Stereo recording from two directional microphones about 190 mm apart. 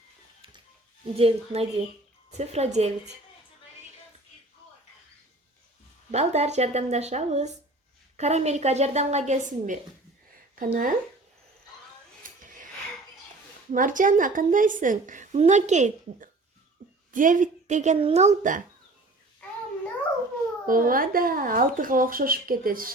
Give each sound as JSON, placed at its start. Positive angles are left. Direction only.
{"t": 1.1, "sound": "a woman's voice", "side_deg": -30}
{"t": 6.1, "sound": "a woman's voice", "side_deg": -35}
{"t": 12.2, "sound": "a sound", "side_deg": -45}
{"t": 13.7, "sound": "a woman's voice", "side_deg": -45}
{"t": 20.7, "sound": "a woman's voice", "side_deg": -45}